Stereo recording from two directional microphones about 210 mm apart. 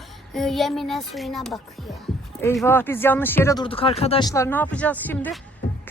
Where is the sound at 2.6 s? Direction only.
10° left (ahead or behind).